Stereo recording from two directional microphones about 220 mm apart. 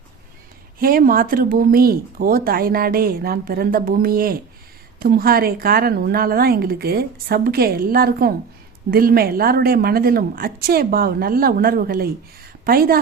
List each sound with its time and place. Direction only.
0.8 s a woman's voice: 40° right (ahead or behind)